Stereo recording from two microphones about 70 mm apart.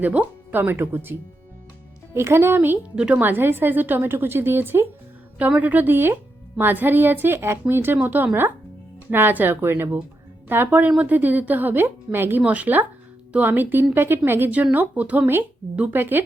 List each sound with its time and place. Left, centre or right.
0.0 s speech: right
2.1 s a woman's voice: right
2.9 s a woman's voice: centre
3.2 s a woman's voice: right
5.4 s a woman's voice: right